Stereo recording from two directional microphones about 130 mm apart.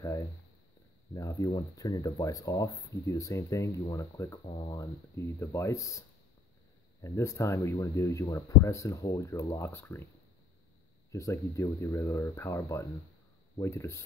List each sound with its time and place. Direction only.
1.1 s speech: 25° left (ahead or behind)
11.1 s speech: 25° left (ahead or behind)